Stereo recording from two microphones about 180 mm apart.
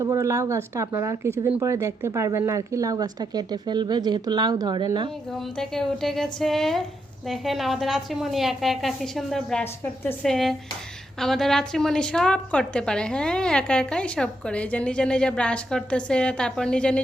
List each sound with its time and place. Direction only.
0.0 s speech: 15° right (ahead or behind)
5.5 s a woman's voice: centre (ahead or behind)